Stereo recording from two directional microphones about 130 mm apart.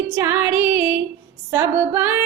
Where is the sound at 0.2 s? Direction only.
20° right (ahead or behind).